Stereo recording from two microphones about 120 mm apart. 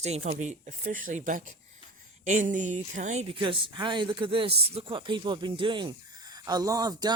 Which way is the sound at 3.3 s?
45° right (ahead or behind).